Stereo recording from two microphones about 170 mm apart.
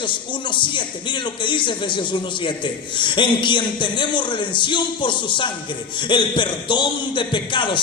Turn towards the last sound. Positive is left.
turn(degrees=30)  # may be behind; listen again after turning